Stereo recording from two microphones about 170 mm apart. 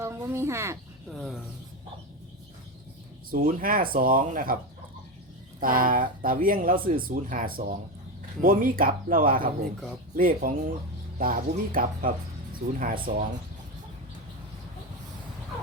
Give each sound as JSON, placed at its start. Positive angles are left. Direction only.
{"t": 0.0, "sound": "speech", "side_deg": -15}
{"t": 1.1, "sound": "a sound", "side_deg": 0}
{"t": 3.2, "sound": "speech", "side_deg": -55}
{"t": 5.5, "sound": "speech", "side_deg": -55}